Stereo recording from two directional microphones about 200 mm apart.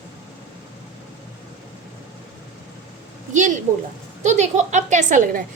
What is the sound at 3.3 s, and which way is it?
A woman's voice, 40° right (ahead or behind).